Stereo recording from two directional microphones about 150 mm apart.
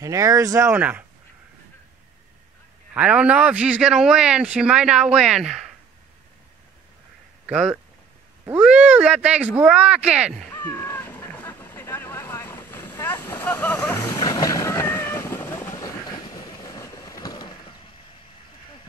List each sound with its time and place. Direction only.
0.0 s speech: 20° right (ahead or behind)
2.9 s a man's voice: 10° right (ahead or behind)
7.4 s a man's voice: 5° right (ahead or behind)
10.5 s vehicle: 15° left (ahead or behind)
14.2 s vehicle: 25° left (ahead or behind)